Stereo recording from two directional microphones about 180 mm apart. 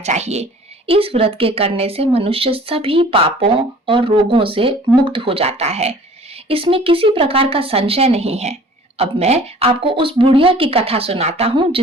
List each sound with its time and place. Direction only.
0.0 s speech: 40° right (ahead or behind)